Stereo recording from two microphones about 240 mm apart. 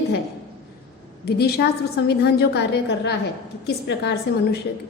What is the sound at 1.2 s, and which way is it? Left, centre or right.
A woman's voice, left.